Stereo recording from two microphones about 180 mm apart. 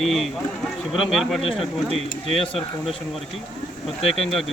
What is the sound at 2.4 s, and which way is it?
Speech, 30° left (ahead or behind).